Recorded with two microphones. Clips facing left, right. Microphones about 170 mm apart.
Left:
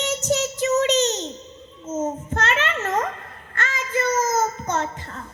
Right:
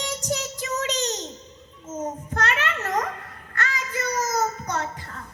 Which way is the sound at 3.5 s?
25° left (ahead or behind).